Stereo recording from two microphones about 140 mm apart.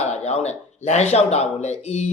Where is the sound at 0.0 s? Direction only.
55° left (ahead or behind).